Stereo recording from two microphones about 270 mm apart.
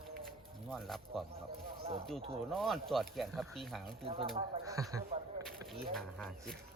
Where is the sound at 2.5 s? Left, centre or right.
Centre.